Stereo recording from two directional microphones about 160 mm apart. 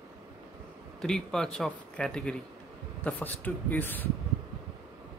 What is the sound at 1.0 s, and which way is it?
Speech, 5° left (ahead or behind).